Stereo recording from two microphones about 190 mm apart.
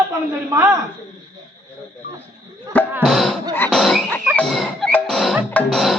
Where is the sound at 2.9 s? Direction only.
Centre (ahead or behind).